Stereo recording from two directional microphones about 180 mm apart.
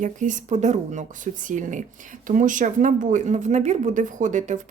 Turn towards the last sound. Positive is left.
turn(degrees=-45)  # may be behind; listen again after turning